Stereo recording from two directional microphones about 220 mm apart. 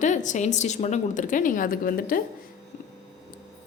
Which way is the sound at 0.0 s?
35° left (ahead or behind).